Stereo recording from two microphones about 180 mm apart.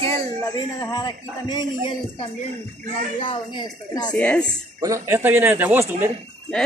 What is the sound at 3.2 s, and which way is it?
Speech, 25° left (ahead or behind).